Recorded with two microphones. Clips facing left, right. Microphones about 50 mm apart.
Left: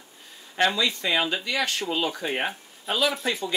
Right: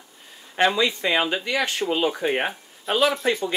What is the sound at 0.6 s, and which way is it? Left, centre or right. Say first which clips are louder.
Speech: right 3 dB; centre.